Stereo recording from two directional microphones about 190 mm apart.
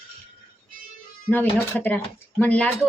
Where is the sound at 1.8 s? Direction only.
10° left (ahead or behind).